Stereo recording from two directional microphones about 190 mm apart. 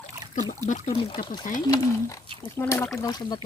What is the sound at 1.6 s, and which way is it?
Speech, 20° left (ahead or behind).